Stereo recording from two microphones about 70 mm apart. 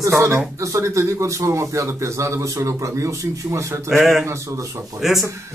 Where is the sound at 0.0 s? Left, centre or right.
Right.